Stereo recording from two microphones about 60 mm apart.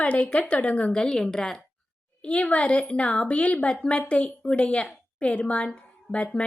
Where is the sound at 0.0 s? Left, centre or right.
Left.